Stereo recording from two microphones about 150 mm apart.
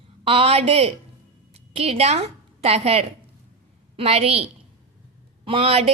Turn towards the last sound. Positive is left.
turn(degrees=-40)  # may be behind; listen again after turning